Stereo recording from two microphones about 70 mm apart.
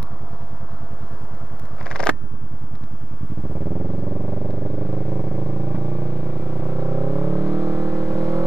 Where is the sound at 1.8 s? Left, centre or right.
Centre.